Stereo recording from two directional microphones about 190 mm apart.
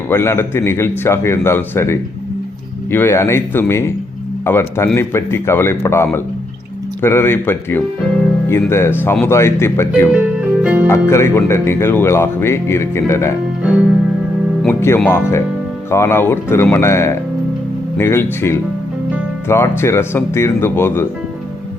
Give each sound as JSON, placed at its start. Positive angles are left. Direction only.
{"t": 0.1, "sound": "speech", "side_deg": 10}
{"t": 10.6, "sound": "music", "side_deg": -5}
{"t": 10.8, "sound": "speech", "side_deg": 15}
{"t": 13.6, "sound": "music", "side_deg": -5}
{"t": 14.6, "sound": "speech", "side_deg": 10}